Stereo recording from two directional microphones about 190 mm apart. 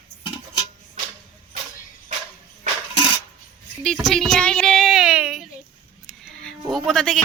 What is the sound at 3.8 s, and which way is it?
Speech, centre (ahead or behind).